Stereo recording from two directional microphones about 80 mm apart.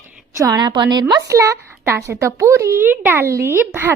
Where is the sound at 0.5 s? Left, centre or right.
Right.